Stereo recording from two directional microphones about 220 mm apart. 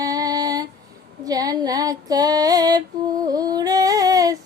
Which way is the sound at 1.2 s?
15° right (ahead or behind).